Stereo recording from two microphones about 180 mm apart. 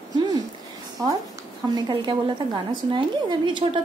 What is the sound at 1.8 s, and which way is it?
Speech, 25° right (ahead or behind).